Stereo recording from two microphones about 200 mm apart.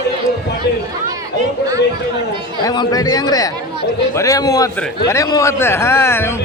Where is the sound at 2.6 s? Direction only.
20° left (ahead or behind).